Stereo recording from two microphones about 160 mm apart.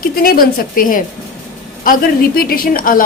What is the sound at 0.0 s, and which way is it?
A woman's voice, 65° left (ahead or behind).